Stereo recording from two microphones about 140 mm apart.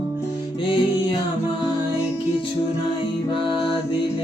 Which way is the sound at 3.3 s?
35° left (ahead or behind).